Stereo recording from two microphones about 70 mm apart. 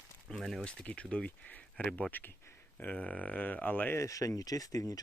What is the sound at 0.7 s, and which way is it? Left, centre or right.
Speech, centre.